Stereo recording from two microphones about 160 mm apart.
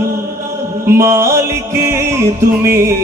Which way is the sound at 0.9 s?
15° right (ahead or behind).